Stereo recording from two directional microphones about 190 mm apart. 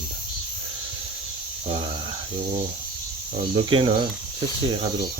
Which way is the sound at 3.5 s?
25° right (ahead or behind).